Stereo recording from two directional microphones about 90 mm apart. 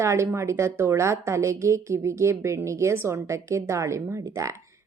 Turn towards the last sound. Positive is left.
turn(degrees=-35)  # may be behind; listen again after turning